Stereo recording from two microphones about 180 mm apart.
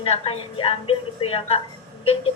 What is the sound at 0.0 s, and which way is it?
A woman's voice, 30° left (ahead or behind).